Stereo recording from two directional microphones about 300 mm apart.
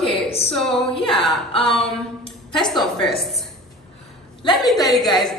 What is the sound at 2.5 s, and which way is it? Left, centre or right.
Speech, centre.